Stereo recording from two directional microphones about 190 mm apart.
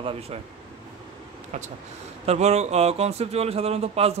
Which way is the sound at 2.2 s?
35° right (ahead or behind).